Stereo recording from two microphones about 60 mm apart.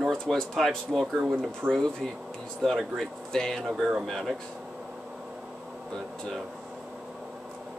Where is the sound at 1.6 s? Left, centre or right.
Right.